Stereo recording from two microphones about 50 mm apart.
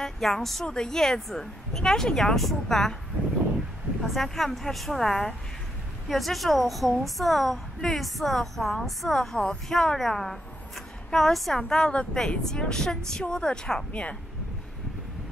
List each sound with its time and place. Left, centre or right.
0.0 s a woman's voice: centre
4.0 s a woman's voice: centre
11.7 s a woman's voice: centre